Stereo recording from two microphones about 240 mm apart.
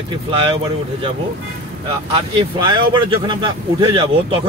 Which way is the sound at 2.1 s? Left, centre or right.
Centre.